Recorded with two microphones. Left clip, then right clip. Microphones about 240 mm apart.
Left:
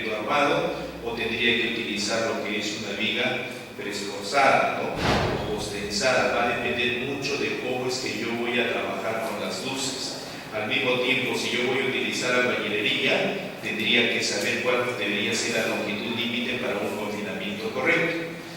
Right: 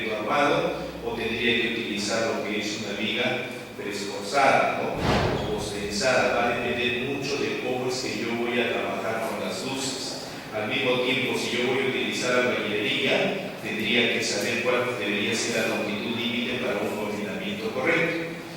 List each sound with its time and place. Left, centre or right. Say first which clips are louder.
0.3 s a man's voice: even; centre
2.0 s a man's voice: right 1 dB; centre
4.4 s a man's voice: even; centre
8.5 s a man's voice: left 1 dB; centre
10.7 s a man's voice: left 1 dB; centre
17.7 s a man's voice: left 1 dB; centre